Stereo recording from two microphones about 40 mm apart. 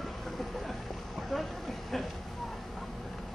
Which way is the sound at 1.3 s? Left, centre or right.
Centre.